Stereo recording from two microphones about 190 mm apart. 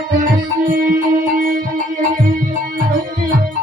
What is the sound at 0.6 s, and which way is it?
Music, 45° right (ahead or behind).